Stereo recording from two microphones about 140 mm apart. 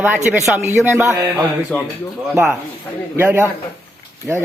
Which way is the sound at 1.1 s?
20° right (ahead or behind).